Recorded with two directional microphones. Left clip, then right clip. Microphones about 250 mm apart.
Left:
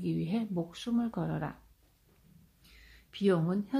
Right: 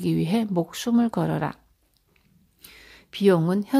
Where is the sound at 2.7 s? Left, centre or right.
Right.